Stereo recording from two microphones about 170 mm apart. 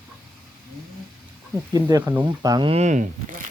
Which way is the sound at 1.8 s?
20° right (ahead or behind).